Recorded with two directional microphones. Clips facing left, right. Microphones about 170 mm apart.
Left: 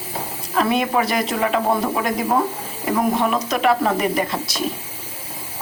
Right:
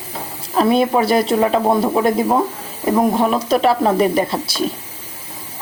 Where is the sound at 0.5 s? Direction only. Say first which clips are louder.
Right 4 dB; 30° right (ahead or behind).